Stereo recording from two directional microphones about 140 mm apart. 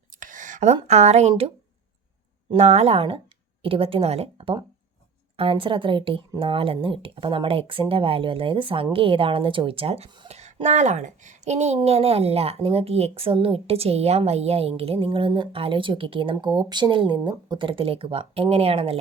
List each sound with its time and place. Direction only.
0.1 s speech: 70° right (ahead or behind); by 1.5 s 45° right (ahead or behind)
2.6 s a woman's voice: 50° right (ahead or behind)
10.2 s a woman's voice: 50° right (ahead or behind)